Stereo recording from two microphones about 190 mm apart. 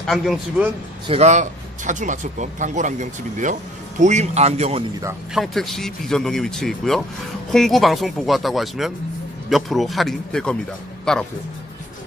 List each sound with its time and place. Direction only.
0.0 s speech: centre (ahead or behind)
1.0 s speech: 35° right (ahead or behind)
5.3 s speech: centre (ahead or behind)